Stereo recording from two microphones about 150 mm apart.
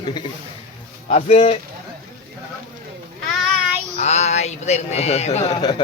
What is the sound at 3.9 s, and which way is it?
Speech, 45° left (ahead or behind).